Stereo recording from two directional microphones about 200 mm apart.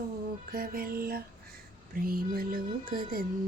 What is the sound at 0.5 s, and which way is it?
Music, 45° right (ahead or behind).